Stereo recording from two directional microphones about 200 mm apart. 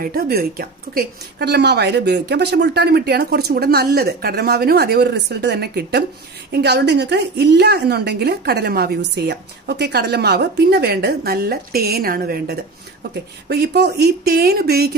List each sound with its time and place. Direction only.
0.0 s a woman's voice: 50° right (ahead or behind)